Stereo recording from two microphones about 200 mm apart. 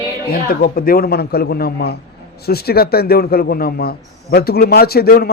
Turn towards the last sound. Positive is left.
turn(degrees=50)  # may be behind; listen again after turning